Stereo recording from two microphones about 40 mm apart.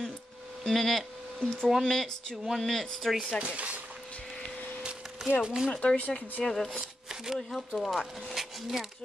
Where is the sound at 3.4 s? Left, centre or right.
Right.